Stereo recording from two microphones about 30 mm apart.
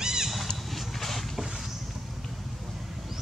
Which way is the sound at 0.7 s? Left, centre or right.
Centre.